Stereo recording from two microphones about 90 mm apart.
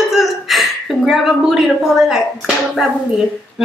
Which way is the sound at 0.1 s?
Centre (ahead or behind).